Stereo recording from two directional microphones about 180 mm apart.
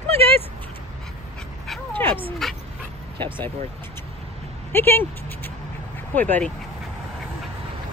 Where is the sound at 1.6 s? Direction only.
10° left (ahead or behind).